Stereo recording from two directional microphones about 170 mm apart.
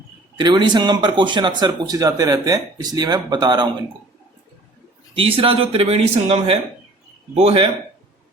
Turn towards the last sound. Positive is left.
turn(degrees=-35)  # may be behind; listen again after turning